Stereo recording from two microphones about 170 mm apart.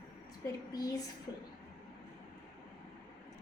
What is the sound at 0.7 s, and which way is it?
Speech, 20° left (ahead or behind).